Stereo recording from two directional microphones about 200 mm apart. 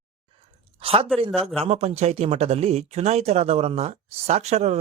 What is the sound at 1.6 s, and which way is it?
Speech, 30° right (ahead or behind).